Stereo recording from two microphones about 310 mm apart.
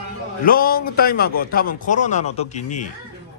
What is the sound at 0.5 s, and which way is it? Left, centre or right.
A man's voice, left.